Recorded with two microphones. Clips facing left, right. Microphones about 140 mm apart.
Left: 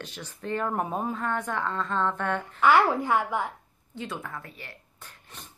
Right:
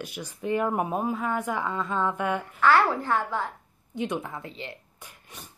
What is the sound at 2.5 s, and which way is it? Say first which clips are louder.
Speech: left 1 dB; 15° left (ahead or behind).